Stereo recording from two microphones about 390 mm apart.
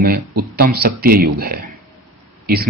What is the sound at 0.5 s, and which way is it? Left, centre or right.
Speech, right.